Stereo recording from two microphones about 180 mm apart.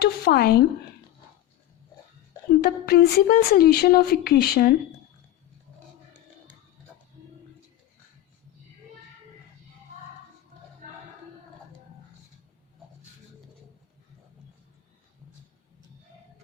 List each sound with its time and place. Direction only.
0.0 s speech: 60° left (ahead or behind)
2.6 s speech: 60° left (ahead or behind)